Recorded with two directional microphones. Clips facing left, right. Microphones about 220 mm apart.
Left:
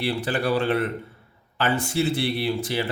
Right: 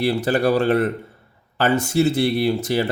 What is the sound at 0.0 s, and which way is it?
A man's voice, 40° right (ahead or behind).